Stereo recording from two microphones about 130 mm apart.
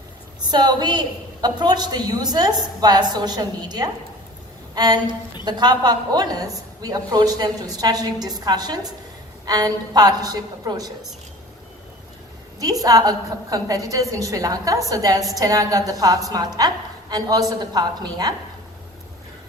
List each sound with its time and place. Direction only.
0.5 s a woman's voice: 35° right (ahead or behind)
12.5 s a woman's voice: 30° right (ahead or behind)